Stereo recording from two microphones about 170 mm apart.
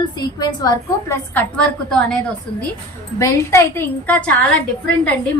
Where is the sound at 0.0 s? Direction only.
25° left (ahead or behind); by 2.1 s 5° left (ahead or behind).